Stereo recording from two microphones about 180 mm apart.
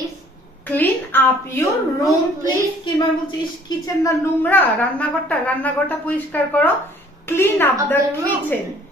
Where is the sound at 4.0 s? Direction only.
10° left (ahead or behind).